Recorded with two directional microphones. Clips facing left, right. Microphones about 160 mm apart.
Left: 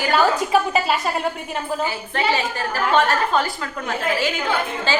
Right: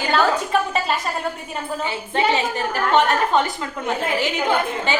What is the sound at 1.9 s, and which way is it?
A woman's voice, 25° right (ahead or behind).